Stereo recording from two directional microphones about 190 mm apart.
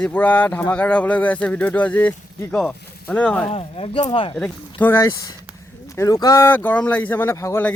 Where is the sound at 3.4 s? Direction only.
30° left (ahead or behind).